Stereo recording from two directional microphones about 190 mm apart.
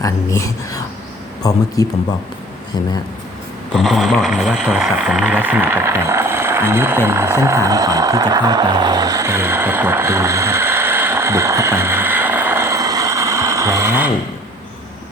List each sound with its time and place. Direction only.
0.0 s speech: 15° left (ahead or behind)
3.8 s speech: centre (ahead or behind)